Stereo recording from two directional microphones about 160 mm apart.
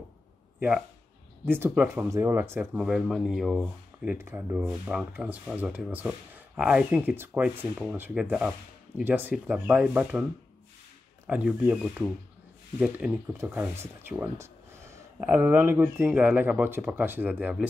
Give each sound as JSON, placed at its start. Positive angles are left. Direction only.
{"t": 0.6, "sound": "speech", "side_deg": -5}
{"t": 2.6, "sound": "speech", "side_deg": -5}
{"t": 11.2, "sound": "speech", "side_deg": -5}